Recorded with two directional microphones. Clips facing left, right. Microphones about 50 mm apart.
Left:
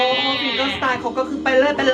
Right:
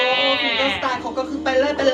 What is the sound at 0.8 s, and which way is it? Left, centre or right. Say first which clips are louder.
A woman's voice: left 3 dB; left.